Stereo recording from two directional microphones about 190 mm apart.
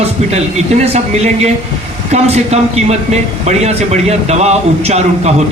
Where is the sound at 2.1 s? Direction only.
35° right (ahead or behind).